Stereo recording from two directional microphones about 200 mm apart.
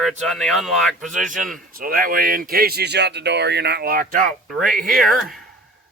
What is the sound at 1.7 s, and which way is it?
Speech, 45° right (ahead or behind).